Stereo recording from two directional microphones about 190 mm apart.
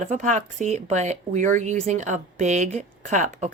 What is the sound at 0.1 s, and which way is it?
Speech, 40° right (ahead or behind).